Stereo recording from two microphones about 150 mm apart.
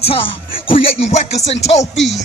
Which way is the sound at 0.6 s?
40° left (ahead or behind).